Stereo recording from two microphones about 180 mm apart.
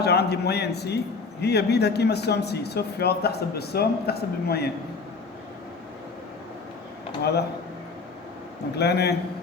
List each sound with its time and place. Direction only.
0.0 s a man's voice: 65° left (ahead or behind)
7.2 s a man's voice: 65° left (ahead or behind)
8.7 s a man's voice: 65° left (ahead or behind)